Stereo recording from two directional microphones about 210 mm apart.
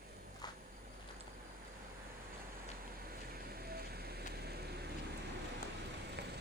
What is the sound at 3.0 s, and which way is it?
Vehicle, 45° right (ahead or behind).